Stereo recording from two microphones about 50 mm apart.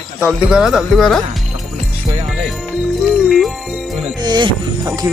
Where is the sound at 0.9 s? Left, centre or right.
Centre.